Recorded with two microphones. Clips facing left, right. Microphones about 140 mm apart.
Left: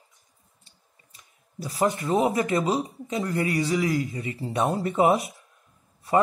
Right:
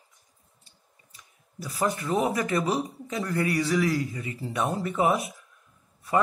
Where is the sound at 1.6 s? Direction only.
30° left (ahead or behind).